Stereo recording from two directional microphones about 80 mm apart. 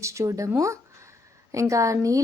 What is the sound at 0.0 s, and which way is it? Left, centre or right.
Speech, right.